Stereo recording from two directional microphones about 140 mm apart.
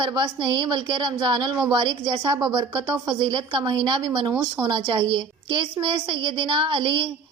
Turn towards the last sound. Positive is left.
turn(degrees=-35)  # may be behind; listen again after turning